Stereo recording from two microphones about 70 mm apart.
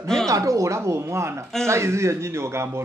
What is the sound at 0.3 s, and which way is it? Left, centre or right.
A man's voice, right.